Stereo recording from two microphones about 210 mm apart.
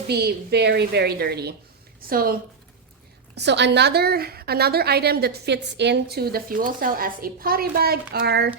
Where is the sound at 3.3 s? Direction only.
55° right (ahead or behind).